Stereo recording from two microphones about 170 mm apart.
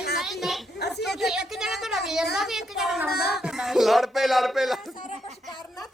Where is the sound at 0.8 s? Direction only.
80° left.